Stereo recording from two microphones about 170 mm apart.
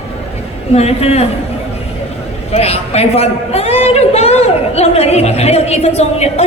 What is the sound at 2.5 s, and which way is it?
A man's voice, 40° left (ahead or behind).